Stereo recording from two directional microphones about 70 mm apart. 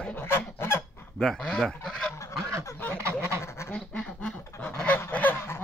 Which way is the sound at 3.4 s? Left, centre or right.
Left.